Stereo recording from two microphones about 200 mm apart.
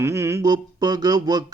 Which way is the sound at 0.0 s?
15° right (ahead or behind).